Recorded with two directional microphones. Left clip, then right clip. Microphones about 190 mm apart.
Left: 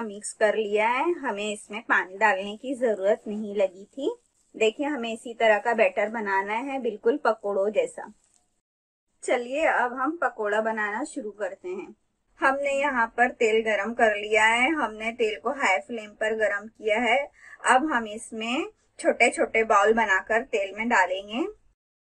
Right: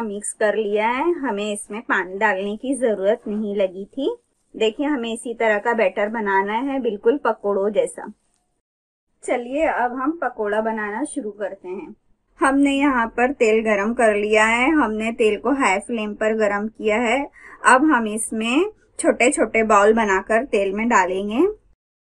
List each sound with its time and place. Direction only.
0.0 s speech: 5° right (ahead or behind)
9.2 s a woman's voice: 15° left (ahead or behind)
12.4 s a woman's voice: 60° right (ahead or behind)